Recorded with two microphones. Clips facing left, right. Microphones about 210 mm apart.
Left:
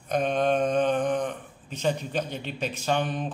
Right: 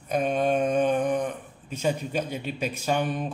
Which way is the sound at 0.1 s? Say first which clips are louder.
Even; 5° right (ahead or behind).